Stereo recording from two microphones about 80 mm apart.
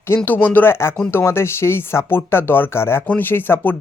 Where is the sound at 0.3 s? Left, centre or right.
Left.